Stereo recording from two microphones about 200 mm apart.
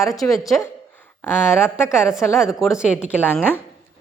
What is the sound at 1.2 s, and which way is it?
A woman's voice, 10° left (ahead or behind).